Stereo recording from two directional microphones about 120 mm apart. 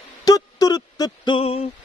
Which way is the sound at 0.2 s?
30° left (ahead or behind).